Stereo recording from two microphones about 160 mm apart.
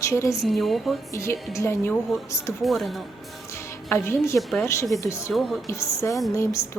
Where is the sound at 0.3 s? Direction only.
Centre (ahead or behind).